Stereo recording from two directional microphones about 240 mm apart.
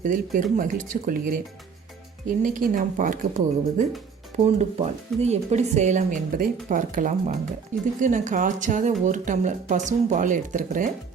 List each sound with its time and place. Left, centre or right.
0.0 s speech: right
2.4 s speech: right